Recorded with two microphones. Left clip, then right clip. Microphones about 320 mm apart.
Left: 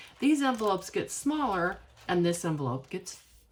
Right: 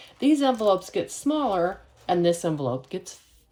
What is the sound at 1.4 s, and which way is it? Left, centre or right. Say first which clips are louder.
Speech: right 4 dB; centre.